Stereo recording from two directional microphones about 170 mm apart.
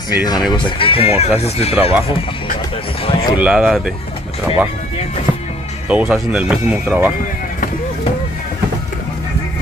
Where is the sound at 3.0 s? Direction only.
30° left (ahead or behind).